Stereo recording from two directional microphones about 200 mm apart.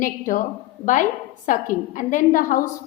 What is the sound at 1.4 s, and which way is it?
A woman's voice, 40° left (ahead or behind).